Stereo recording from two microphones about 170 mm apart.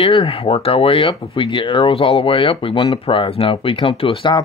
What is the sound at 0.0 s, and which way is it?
Speech, 35° left (ahead or behind).